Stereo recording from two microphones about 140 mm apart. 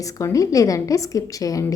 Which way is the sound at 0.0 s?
25° left (ahead or behind).